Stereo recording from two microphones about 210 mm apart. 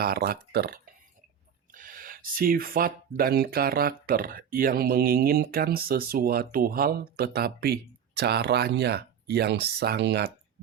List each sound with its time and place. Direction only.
0.0 s speech: 45° right (ahead or behind)
1.7 s a sound: 40° right (ahead or behind)
3.2 s speech: 45° right (ahead or behind)